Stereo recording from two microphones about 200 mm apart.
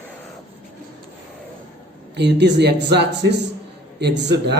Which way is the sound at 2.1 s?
60° right (ahead or behind).